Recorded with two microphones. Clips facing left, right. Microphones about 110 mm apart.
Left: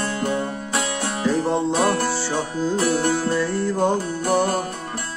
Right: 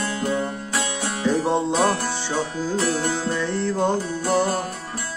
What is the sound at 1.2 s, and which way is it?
Music, centre (ahead or behind).